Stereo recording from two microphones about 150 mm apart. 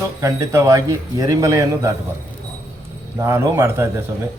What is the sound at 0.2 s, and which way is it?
A man's voice, 20° right (ahead or behind).